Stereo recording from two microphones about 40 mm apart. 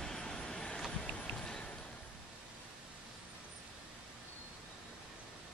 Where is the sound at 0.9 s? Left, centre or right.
Left.